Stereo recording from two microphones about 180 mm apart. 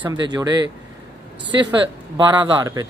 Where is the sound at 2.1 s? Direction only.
25° right (ahead or behind).